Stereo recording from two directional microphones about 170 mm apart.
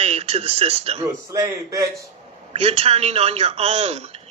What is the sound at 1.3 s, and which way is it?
Speech, 20° right (ahead or behind).